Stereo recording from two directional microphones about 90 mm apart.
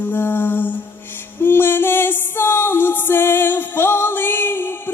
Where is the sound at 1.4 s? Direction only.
25° left (ahead or behind).